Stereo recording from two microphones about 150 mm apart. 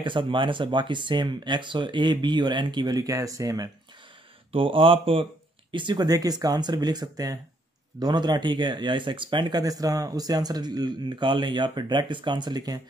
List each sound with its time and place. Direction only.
0.0 s speech: 35° right (ahead or behind)
4.5 s speech: 35° right (ahead or behind)